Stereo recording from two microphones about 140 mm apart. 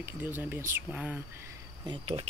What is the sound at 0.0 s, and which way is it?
Speech, 15° right (ahead or behind).